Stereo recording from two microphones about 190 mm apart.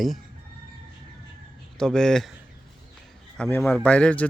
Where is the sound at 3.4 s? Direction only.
5° left (ahead or behind).